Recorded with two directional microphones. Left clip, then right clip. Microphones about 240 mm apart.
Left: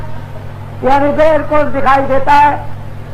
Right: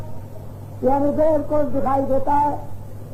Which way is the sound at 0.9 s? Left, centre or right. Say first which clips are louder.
Left 8 dB; right.